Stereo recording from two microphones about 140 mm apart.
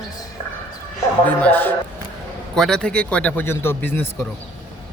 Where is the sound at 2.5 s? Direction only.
5° left (ahead or behind).